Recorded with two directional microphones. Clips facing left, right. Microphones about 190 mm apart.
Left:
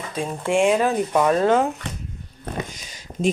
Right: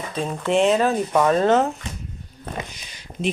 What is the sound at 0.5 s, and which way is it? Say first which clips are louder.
Speech: even; 10° left (ahead or behind).